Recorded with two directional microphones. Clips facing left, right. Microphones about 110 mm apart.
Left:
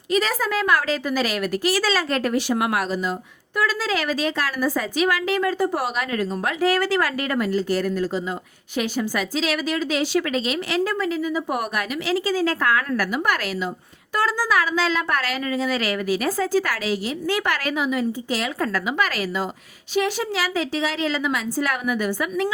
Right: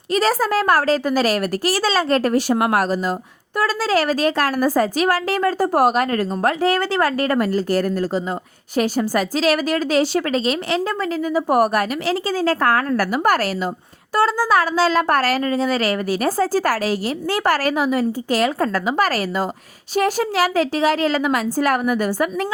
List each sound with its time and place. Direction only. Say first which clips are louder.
0.1 s a woman's voice: right 4 dB; 35° right (ahead or behind)
6.6 s a woman's voice: left 2 dB; 30° right (ahead or behind)
14.2 s a woman's voice: right 4 dB; 30° right (ahead or behind); by 18.7 s 45° right (ahead or behind)
18.7 s a woman's voice: right 5 dB; 35° right (ahead or behind)